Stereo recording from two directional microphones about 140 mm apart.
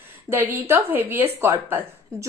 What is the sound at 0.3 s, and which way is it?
Speech, 15° right (ahead or behind).